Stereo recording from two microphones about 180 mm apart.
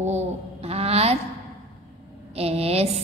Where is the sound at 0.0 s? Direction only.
35° right (ahead or behind).